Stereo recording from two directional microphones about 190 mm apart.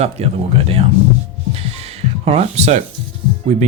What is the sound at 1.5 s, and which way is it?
Music, 30° right (ahead or behind).